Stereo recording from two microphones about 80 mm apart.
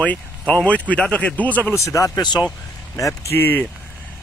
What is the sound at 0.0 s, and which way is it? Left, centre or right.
Speech, centre.